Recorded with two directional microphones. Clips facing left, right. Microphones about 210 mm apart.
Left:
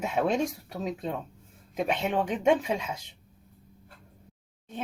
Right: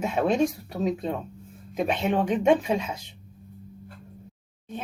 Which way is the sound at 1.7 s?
15° left (ahead or behind).